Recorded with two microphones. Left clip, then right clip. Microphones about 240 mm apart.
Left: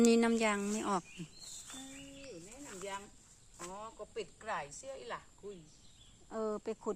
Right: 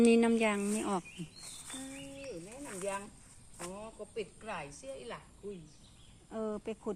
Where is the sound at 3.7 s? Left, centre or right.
Left.